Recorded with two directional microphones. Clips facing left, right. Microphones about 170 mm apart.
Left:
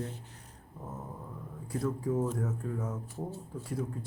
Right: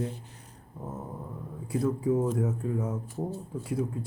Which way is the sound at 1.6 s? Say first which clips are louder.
Right 5 dB; 10° right (ahead or behind).